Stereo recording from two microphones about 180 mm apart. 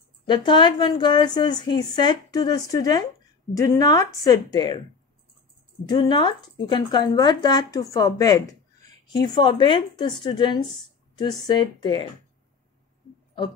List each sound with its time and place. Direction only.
0.3 s a woman's voice: 25° left (ahead or behind)
5.9 s a woman's voice: 25° left (ahead or behind)